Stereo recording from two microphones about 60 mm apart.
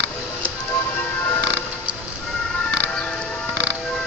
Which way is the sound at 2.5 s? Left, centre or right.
Centre.